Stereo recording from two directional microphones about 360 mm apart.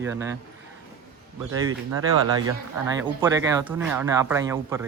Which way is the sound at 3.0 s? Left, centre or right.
Centre.